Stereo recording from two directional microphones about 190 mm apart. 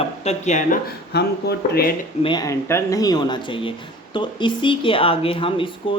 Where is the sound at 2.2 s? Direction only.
20° left (ahead or behind).